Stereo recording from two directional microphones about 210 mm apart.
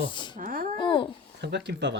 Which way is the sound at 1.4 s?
55° right (ahead or behind).